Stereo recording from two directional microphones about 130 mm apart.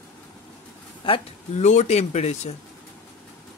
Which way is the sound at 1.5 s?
60° left (ahead or behind).